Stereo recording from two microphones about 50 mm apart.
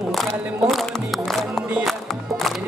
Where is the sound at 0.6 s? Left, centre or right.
Centre.